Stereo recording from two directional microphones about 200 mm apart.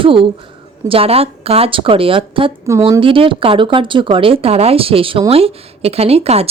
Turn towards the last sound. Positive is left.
turn(degrees=-30)  # may be behind; listen again after turning